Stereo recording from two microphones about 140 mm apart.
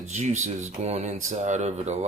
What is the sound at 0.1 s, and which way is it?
Speech, 55° right (ahead or behind).